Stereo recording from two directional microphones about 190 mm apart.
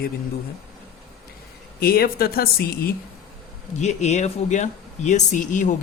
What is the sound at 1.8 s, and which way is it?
Speech, 55° left (ahead or behind).